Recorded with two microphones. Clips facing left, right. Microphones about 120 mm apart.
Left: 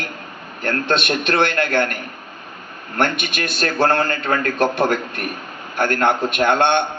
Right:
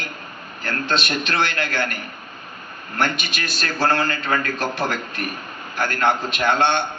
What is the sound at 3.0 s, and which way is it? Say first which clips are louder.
A man's voice: left 3 dB; 55° left (ahead or behind).